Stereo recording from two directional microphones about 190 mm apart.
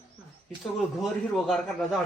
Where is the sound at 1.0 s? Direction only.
Centre (ahead or behind).